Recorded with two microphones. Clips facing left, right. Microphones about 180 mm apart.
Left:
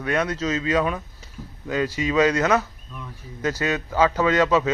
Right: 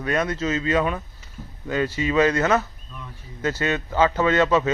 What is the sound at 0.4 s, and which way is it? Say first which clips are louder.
A man's voice: right 1 dB; 5° left (ahead or behind).